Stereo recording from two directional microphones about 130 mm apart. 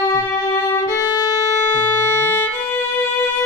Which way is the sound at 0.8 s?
25° left (ahead or behind).